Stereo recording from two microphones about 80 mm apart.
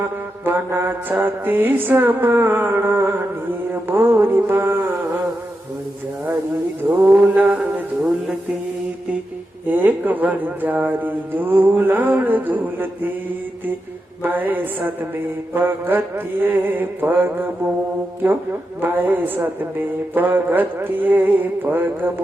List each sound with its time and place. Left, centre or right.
0.4 s speech: right
6.8 s mantra: right
9.6 s speech: right
14.2 s speech: right
18.8 s speech: right